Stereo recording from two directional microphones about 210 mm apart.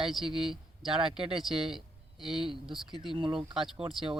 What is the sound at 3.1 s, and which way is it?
Speech, 25° right (ahead or behind).